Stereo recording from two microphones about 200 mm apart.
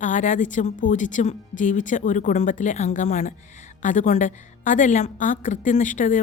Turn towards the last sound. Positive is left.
turn(degrees=40)  # may be behind; listen again after turning